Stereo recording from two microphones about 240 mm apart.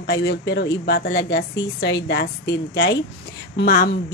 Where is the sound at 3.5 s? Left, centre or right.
Left.